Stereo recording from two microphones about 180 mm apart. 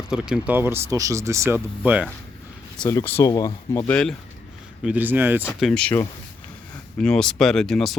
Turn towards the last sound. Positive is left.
turn(degrees=0)  # may be behind; listen again after turning